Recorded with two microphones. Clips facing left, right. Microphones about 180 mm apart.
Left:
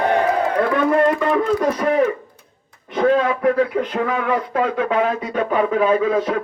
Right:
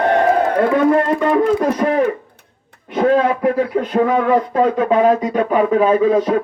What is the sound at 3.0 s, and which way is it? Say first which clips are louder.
Speech: right 2 dB; 25° right (ahead or behind).